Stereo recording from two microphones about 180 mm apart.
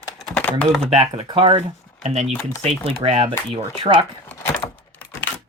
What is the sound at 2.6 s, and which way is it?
Speech, 35° right (ahead or behind).